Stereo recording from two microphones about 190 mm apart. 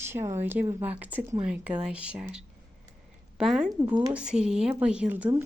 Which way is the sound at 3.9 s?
25° right (ahead or behind).